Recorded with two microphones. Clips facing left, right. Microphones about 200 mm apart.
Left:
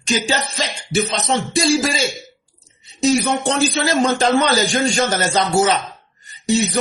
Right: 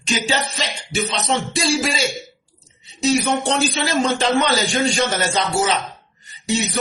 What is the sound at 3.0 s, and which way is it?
Speech, 45° left (ahead or behind).